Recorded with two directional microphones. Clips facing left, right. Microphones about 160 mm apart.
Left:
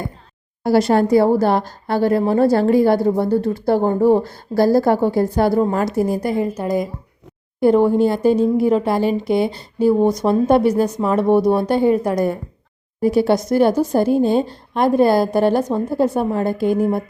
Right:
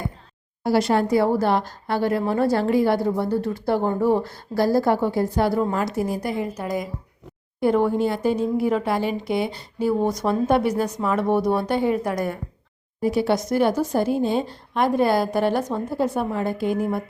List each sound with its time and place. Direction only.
0.6 s a woman's voice: 40° left (ahead or behind)